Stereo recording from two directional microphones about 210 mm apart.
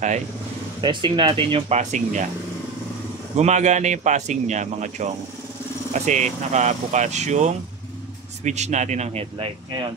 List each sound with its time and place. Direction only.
0.7 s speech: 20° right (ahead or behind)
3.3 s speech: 35° right (ahead or behind)